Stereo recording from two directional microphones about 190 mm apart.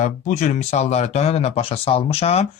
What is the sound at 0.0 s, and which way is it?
Speech, 40° left (ahead or behind).